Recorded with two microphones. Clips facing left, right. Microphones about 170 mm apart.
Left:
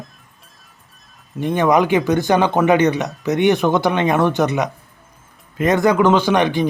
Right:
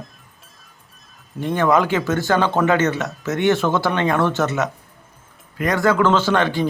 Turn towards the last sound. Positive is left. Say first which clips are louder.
# left 3 dB
turn(degrees=15)  # may be behind; listen again after turning